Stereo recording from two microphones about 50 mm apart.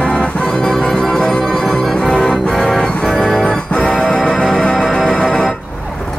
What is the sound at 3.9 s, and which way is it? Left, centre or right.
Music, centre.